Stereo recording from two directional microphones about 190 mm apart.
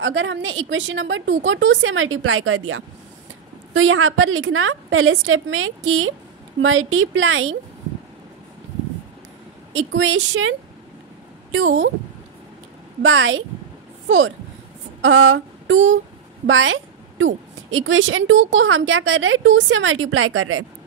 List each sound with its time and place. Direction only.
0.0 s speech: 85° right
9.8 s speech: 90° right
13.0 s speech: 90° right
15.0 s a sound: 90° right
16.4 s a woman's voice: 90° right